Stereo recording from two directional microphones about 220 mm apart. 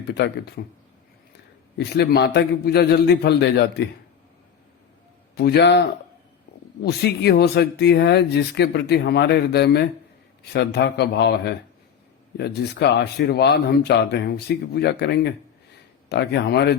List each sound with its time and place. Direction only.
0.1 s speech: 50° left (ahead or behind)
1.8 s speech: 50° left (ahead or behind)
5.3 s speech: 45° left (ahead or behind)